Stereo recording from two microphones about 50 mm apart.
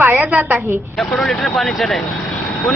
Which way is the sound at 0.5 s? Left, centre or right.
Right.